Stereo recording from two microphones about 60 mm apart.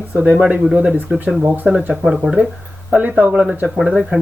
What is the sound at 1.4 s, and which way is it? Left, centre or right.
Speech, right.